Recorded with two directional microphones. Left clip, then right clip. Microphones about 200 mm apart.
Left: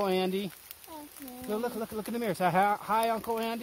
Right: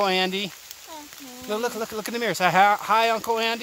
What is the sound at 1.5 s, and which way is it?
Speech, 15° right (ahead or behind).